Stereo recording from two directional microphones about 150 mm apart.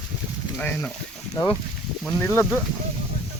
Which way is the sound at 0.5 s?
10° left (ahead or behind).